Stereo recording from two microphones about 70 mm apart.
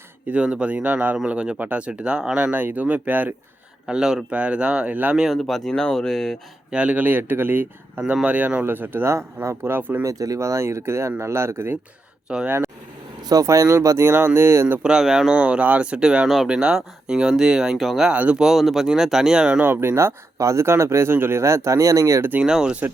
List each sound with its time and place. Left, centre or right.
0.3 s speech: centre
3.8 s speech: centre
5.3 s speech: centre
6.7 s speech: centre
9.1 s speech: right
10.0 s speech: right
12.3 s speech: centre
13.2 s speech: right
14.8 s speech: centre
18.1 s speech: centre
18.4 s speech: centre
19.6 s speech: right
22.4 s speech: centre